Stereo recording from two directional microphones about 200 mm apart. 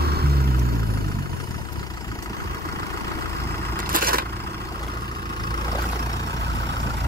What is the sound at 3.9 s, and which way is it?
Vehicle, 45° right (ahead or behind).